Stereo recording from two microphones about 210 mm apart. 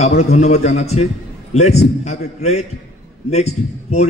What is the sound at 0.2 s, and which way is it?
A man's voice, 30° left (ahead or behind).